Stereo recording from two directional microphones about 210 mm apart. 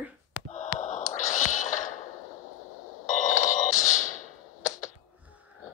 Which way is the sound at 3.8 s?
35° left (ahead or behind).